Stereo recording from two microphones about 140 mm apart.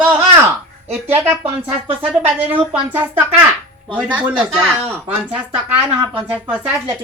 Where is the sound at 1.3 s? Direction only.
15° right (ahead or behind).